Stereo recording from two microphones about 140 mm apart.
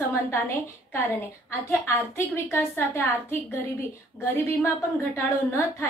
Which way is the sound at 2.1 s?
15° left (ahead or behind).